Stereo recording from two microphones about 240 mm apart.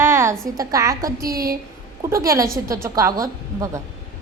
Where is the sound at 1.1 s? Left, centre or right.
Right.